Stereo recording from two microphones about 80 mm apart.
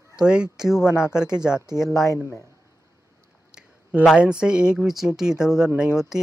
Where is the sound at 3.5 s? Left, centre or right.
Centre.